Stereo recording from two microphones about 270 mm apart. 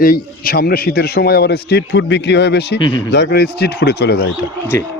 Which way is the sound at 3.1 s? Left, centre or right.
Left.